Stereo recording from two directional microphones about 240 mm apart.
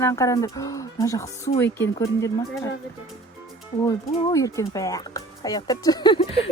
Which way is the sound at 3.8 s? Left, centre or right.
Centre.